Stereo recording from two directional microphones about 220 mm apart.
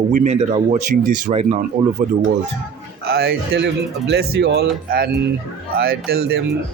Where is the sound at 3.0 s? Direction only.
45° right (ahead or behind).